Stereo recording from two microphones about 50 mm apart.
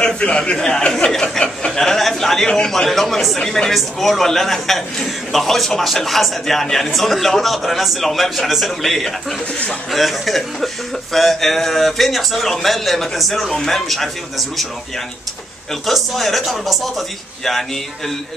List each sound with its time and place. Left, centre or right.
0.0 s a man's voice: centre
1.4 s chuckle: left
1.8 s a man's voice: centre
3.3 s a man's voice: centre
15.9 s a man's voice: centre